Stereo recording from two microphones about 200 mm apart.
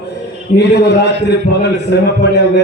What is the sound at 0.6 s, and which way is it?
A man's voice, 55° left (ahead or behind).